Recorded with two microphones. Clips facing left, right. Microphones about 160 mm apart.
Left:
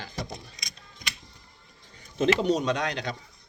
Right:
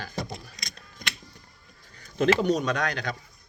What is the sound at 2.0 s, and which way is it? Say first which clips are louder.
Speech: right 1 dB; 25° left (ahead or behind).